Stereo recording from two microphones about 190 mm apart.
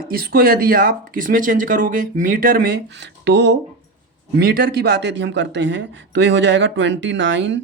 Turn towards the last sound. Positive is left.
turn(degrees=-70)  # may be behind; listen again after turning